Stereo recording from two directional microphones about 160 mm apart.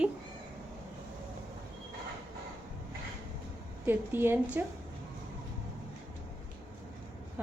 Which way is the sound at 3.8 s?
15° right (ahead or behind).